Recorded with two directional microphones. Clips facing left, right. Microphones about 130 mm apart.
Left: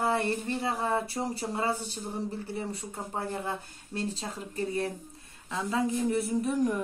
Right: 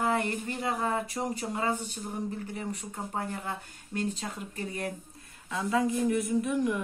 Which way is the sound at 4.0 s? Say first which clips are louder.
Right 1 dB; 30° left (ahead or behind).